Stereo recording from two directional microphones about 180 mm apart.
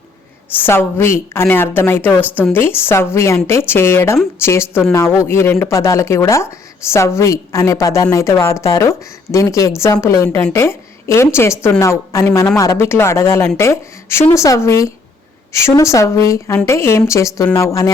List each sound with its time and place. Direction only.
0.6 s a woman's voice: 15° left (ahead or behind)